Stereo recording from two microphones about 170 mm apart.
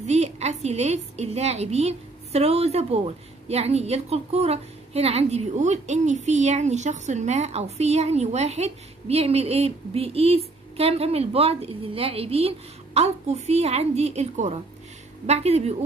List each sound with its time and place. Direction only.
0.0 s a woman's voice: 40° right (ahead or behind)